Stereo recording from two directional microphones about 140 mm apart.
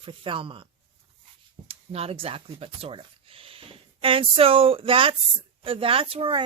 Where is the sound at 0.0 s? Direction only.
40° right (ahead or behind).